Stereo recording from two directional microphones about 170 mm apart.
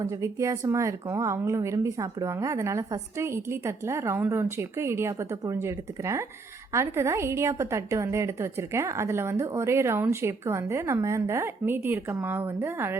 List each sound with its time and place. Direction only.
0.0 s a woman's voice: 20° right (ahead or behind)